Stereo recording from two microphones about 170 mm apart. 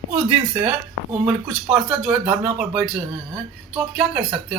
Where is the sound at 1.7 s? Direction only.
5° right (ahead or behind).